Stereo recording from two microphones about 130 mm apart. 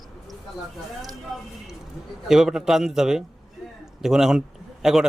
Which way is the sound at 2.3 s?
5° right (ahead or behind).